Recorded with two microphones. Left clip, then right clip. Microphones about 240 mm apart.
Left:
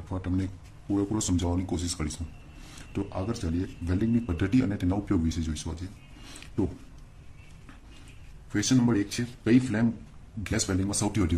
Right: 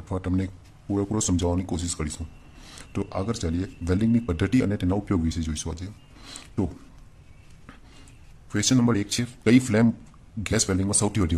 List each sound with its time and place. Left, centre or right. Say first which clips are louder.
0.1 s speech: right 4 dB; right
8.5 s speech: right 3 dB; right